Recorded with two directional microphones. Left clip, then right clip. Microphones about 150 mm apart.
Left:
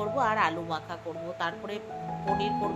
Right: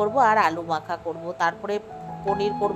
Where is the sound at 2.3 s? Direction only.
Centre (ahead or behind).